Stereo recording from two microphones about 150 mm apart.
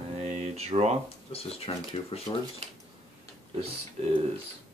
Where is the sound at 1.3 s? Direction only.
40° left (ahead or behind).